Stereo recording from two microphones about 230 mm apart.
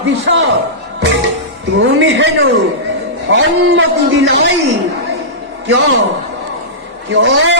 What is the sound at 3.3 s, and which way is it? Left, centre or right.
A man's voice, right.